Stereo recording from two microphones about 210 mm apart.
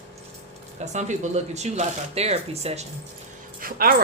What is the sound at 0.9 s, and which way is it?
Speech, 35° right (ahead or behind).